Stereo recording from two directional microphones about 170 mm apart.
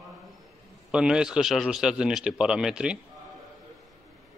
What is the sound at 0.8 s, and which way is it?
A man's voice, 5° right (ahead or behind).